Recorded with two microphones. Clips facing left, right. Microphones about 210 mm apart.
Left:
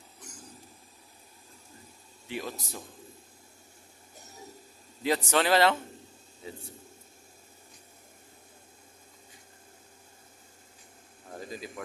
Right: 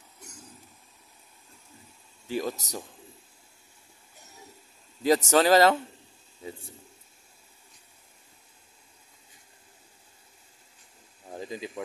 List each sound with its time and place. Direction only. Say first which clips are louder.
2.2 s speech: right 6 dB; 40° right (ahead or behind)
5.0 s speech: right 5 dB; 40° right (ahead or behind)
11.3 s a sound: right 4 dB; 20° right (ahead or behind)